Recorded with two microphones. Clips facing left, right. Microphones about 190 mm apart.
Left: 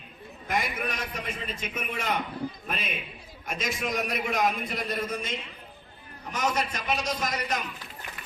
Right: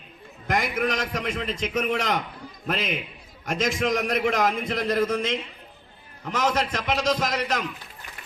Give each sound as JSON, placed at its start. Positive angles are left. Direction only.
{"t": 0.4, "sound": "a man's voice", "side_deg": -90}